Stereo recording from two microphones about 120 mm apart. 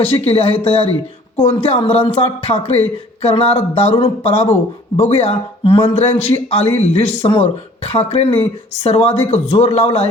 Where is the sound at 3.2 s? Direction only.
55° left (ahead or behind).